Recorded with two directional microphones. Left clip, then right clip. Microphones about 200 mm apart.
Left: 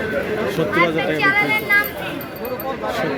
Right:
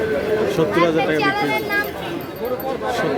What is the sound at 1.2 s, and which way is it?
Speech, 25° right (ahead or behind).